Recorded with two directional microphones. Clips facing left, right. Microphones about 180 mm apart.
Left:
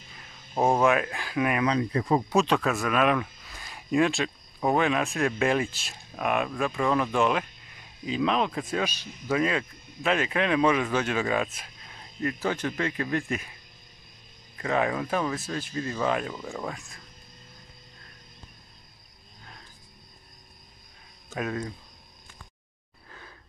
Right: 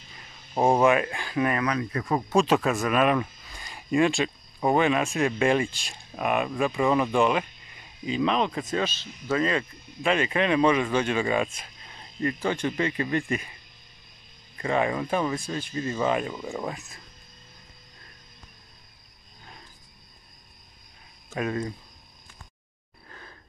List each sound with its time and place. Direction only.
0.6 s speech: centre (ahead or behind)
1.6 s speech: 25° left (ahead or behind)
2.3 s speech: 5° right (ahead or behind)
14.6 s speech: centre (ahead or behind)
21.4 s speech: centre (ahead or behind)